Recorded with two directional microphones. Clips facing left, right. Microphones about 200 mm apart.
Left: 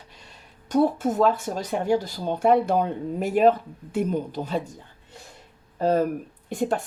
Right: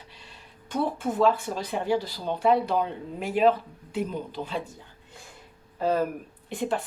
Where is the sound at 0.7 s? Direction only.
40° left (ahead or behind).